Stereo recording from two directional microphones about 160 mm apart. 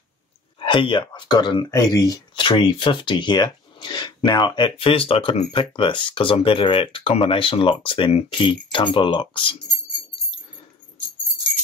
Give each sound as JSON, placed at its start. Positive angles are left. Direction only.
{"t": 0.6, "sound": "speech", "side_deg": 30}